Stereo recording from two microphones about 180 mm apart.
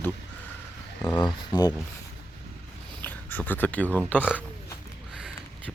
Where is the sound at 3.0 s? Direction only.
10° left (ahead or behind).